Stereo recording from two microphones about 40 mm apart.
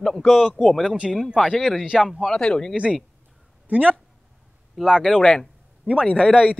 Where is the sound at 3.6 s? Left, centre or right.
Right.